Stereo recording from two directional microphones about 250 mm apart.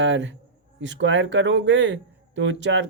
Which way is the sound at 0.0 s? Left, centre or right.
Right.